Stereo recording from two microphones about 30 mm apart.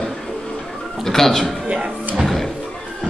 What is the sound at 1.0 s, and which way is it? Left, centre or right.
Speech, centre.